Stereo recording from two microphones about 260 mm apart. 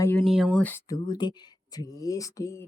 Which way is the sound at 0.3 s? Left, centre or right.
Centre.